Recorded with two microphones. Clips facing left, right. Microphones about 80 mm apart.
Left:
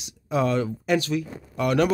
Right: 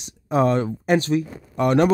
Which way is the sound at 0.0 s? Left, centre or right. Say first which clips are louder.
Right 4 dB; right.